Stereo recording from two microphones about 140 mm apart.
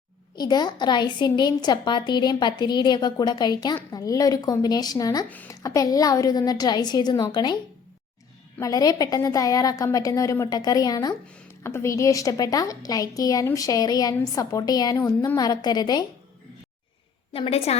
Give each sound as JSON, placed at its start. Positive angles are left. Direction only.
{"t": 0.3, "sound": "a woman's voice", "side_deg": 30}
{"t": 8.5, "sound": "a woman's voice", "side_deg": 25}
{"t": 17.3, "sound": "a woman's voice", "side_deg": 45}